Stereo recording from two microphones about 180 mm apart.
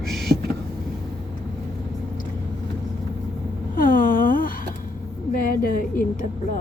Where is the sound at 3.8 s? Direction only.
50° left (ahead or behind).